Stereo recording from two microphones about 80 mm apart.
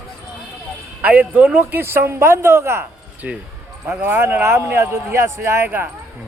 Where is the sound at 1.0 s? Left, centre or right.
Centre.